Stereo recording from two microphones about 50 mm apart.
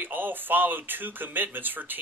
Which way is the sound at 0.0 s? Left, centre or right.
Right.